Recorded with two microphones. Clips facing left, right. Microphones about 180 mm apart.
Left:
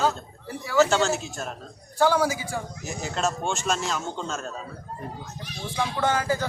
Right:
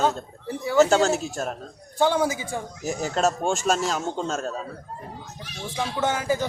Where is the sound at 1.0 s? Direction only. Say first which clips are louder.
Right 3 dB; 45° right (ahead or behind).